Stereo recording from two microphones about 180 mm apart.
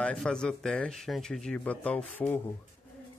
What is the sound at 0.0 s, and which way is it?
Speech, 5° left (ahead or behind).